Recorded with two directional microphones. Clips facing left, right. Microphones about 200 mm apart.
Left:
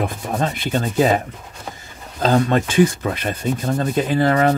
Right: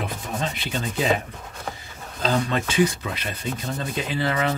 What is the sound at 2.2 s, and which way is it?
Speech, 50° left (ahead or behind).